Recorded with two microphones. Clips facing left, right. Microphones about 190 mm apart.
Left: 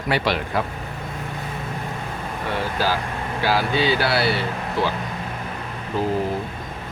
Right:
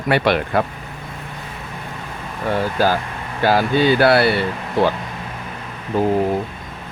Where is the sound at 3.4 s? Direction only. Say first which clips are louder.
Right 5 dB; 50° right (ahead or behind).